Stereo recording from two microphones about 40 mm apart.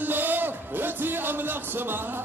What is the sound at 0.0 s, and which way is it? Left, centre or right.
A man's voice, right.